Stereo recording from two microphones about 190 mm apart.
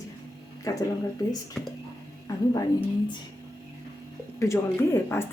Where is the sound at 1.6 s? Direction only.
Centre (ahead or behind).